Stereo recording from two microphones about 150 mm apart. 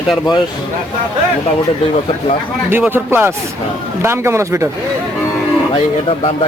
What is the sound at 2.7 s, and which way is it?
Speech, 15° right (ahead or behind).